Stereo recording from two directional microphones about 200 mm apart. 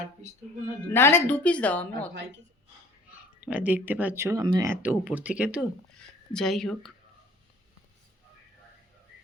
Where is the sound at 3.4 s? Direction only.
5° right (ahead or behind).